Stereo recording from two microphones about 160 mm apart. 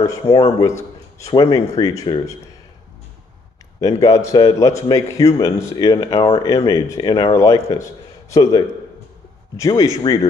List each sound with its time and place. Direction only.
0.0 s a man's voice: 20° left (ahead or behind)
3.8 s a man's voice: 20° left (ahead or behind)